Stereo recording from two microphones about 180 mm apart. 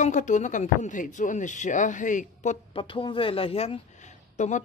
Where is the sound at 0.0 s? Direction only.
45° left (ahead or behind).